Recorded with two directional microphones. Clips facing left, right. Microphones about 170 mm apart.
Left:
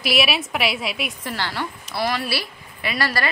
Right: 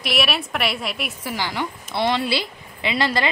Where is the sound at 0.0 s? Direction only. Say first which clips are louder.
Left 1 dB; centre (ahead or behind).